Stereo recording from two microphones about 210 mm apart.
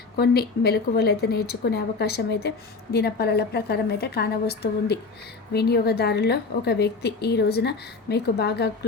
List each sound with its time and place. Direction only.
0.2 s a woman's voice: 50° left (ahead or behind)